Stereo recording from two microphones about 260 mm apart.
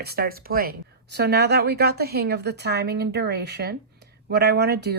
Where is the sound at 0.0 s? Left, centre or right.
Right.